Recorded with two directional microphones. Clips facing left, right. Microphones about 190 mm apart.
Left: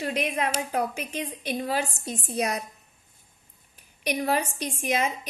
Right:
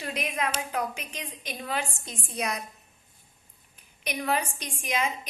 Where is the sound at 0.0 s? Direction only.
35° left (ahead or behind).